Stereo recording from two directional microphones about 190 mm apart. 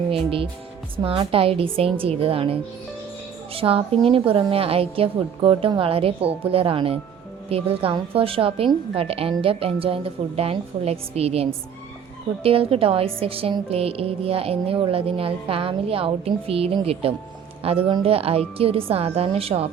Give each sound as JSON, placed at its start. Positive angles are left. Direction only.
{"t": 0.1, "sound": "a woman's voice", "side_deg": -30}